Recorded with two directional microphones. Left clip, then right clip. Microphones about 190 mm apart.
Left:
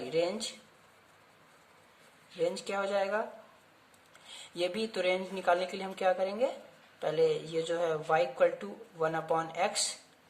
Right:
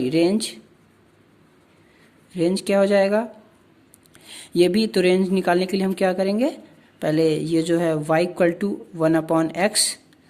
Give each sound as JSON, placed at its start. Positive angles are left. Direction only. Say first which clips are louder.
{"t": 0.0, "sound": "speech", "louder": "right 11 dB", "side_deg": -55}
{"t": 2.4, "sound": "speech", "louder": "right 13 dB", "side_deg": -55}
{"t": 4.5, "sound": "speech", "louder": "right 14 dB", "side_deg": -60}